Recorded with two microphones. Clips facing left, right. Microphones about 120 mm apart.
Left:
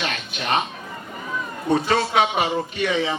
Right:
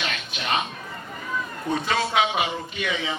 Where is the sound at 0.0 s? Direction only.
40° left (ahead or behind).